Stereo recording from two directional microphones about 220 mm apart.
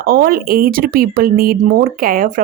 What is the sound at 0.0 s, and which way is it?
Speech, 40° right (ahead or behind).